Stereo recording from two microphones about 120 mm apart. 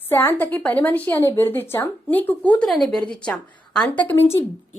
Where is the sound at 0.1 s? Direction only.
15° left (ahead or behind).